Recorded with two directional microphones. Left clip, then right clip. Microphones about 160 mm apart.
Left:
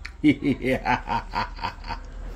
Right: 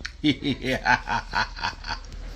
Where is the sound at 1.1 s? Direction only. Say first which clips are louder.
Right 1 dB; 10° left (ahead or behind).